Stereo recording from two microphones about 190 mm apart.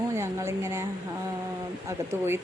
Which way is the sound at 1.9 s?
10° right (ahead or behind).